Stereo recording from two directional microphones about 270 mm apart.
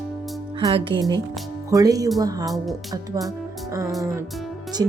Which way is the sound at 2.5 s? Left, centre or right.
Centre.